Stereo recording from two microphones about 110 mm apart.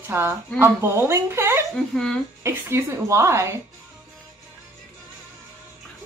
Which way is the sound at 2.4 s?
25° right (ahead or behind).